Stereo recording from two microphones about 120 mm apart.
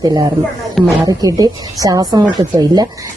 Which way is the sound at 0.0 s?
30° right (ahead or behind).